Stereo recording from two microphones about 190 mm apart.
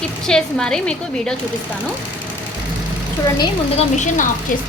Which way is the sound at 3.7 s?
40° left (ahead or behind).